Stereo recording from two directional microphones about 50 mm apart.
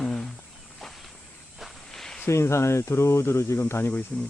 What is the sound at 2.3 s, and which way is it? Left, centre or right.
Speech, left.